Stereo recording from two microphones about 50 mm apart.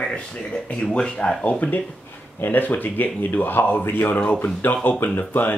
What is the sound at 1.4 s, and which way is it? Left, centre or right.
Speech, left.